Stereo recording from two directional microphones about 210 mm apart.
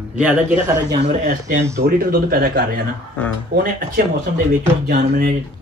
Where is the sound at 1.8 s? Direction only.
45° right (ahead or behind).